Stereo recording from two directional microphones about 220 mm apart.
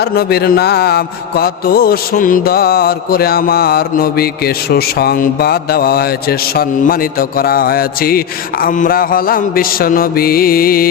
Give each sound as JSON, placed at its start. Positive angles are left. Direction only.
{"t": 0.0, "sound": "music", "side_deg": 45}
{"t": 8.6, "sound": "mantra", "side_deg": 40}